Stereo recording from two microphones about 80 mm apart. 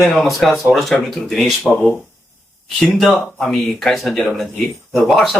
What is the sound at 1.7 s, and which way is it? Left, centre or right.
Speech, left.